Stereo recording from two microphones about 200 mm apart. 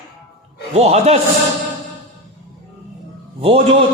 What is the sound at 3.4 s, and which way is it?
Speech, 30° right (ahead or behind).